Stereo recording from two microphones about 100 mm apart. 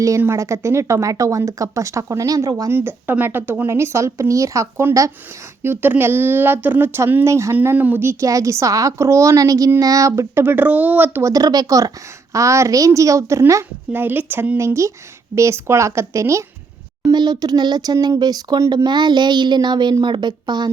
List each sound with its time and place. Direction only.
0.2 s speech: 25° right (ahead or behind)
2.7 s a woman's voice: 20° right (ahead or behind)
11.2 s a woman's voice: 35° right (ahead or behind)
17.0 s a woman's voice: 45° right (ahead or behind)